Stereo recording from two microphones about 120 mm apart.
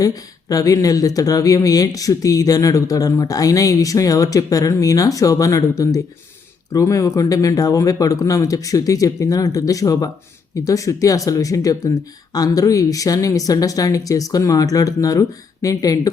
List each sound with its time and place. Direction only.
0.0 s speech: 30° left (ahead or behind)